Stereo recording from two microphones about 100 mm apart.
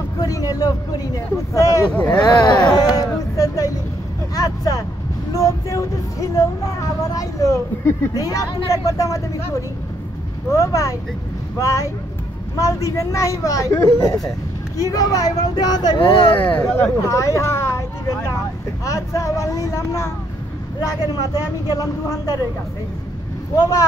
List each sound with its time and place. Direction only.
0.2 s speech: 35° left (ahead or behind)
2.0 s speech: 45° left (ahead or behind)
10.5 s speech: 30° left (ahead or behind)
16.0 s speech: 60° left (ahead or behind)
16.4 s speech: 15° left (ahead or behind)
17.0 s speech: 35° left (ahead or behind)